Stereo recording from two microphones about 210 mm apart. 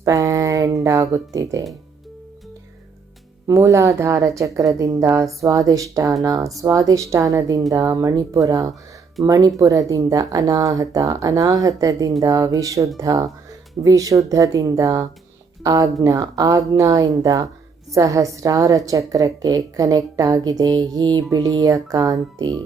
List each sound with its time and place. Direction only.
0.0 s speech: 15° right (ahead or behind)
3.4 s a woman's voice: 15° right (ahead or behind)